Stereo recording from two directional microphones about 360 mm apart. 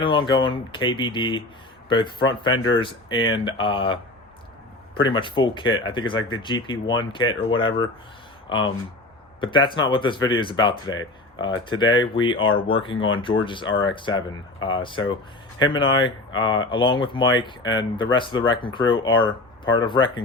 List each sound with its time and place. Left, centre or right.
0.0 s speech: centre
4.9 s speech: centre